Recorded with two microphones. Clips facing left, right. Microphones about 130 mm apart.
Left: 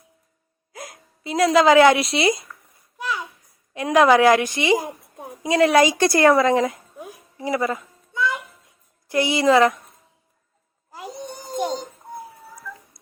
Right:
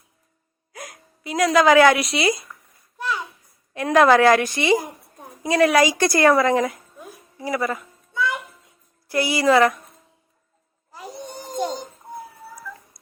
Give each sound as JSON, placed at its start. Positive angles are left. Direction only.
{"t": 0.7, "sound": "a woman's voice", "side_deg": 25}
{"t": 3.8, "sound": "a woman's voice", "side_deg": 15}
{"t": 10.9, "sound": "a sound", "side_deg": 15}
{"t": 11.5, "sound": "music", "side_deg": 15}
{"t": 12.7, "sound": "telephone dialing", "side_deg": -5}